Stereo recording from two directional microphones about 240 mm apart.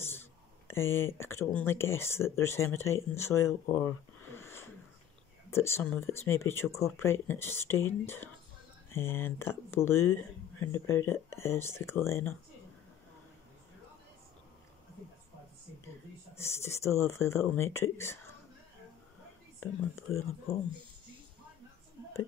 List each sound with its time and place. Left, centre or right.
0.7 s speech: centre
4.4 s wheeze: centre
5.5 s speech: centre
16.3 s speech: centre
19.6 s speech: centre